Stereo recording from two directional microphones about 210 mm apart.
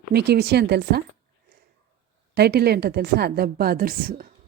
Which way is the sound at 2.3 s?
50° right (ahead or behind).